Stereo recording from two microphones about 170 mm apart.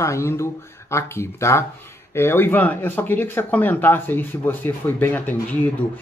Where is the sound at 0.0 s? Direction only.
15° left (ahead or behind).